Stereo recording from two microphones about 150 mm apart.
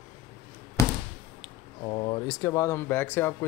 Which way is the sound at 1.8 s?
25° left (ahead or behind).